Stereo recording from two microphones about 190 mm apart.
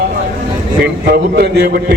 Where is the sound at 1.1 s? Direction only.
60° right (ahead or behind).